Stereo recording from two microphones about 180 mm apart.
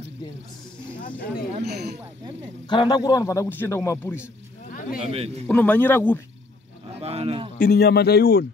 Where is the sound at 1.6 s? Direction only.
65° right (ahead or behind).